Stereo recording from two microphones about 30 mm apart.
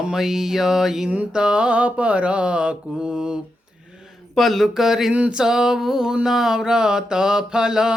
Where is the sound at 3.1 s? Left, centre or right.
Right.